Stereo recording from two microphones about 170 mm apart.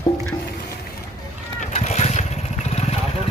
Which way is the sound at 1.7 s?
40° left (ahead or behind).